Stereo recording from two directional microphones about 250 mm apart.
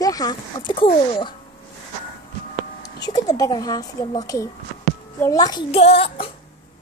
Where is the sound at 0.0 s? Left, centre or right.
Centre.